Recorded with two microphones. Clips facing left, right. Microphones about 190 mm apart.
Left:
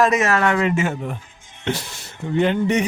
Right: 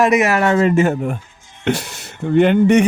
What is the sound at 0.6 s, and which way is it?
Speech, 40° right (ahead or behind).